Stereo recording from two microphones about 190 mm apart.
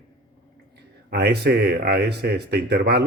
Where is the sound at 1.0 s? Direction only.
60° right (ahead or behind).